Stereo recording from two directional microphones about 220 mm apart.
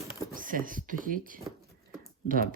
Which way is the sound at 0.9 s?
40° right (ahead or behind).